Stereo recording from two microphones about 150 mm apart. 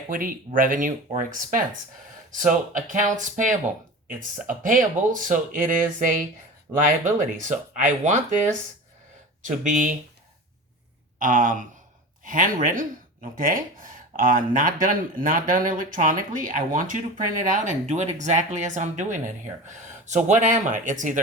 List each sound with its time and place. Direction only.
0.1 s speech: 65° right (ahead or behind)
9.4 s speech: 60° right (ahead or behind)
11.2 s speech: 65° right (ahead or behind)